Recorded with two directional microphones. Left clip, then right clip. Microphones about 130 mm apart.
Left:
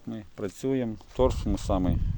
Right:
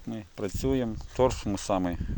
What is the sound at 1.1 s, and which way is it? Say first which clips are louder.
Speech: even; 25° left (ahead or behind).